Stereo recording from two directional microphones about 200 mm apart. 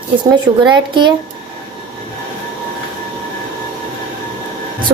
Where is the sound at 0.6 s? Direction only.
25° right (ahead or behind).